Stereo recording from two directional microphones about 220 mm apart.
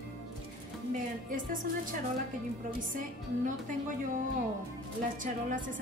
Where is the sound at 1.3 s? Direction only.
40° right (ahead or behind).